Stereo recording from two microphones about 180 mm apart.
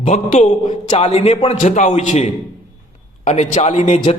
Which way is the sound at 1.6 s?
45° left (ahead or behind).